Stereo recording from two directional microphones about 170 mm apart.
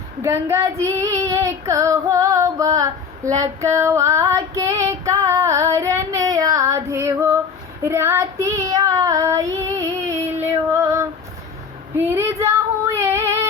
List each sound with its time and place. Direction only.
0.2 s female singing: 15° right (ahead or behind)
7.9 s child singing: 15° right (ahead or behind)
11.9 s female singing: 15° right (ahead or behind)